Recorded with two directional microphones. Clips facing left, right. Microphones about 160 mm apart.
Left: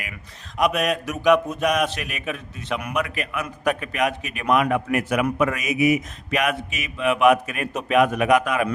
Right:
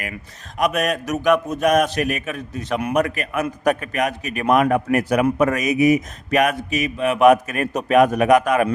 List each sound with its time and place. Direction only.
0.6 s a man's voice: 45° right (ahead or behind)